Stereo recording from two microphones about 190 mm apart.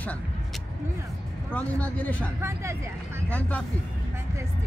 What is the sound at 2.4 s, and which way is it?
Speech, 15° right (ahead or behind).